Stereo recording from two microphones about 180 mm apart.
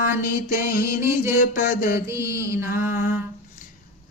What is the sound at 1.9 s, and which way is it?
Mantra, 15° right (ahead or behind).